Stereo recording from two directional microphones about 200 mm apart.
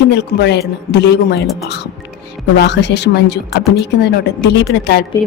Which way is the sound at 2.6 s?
60° left (ahead or behind).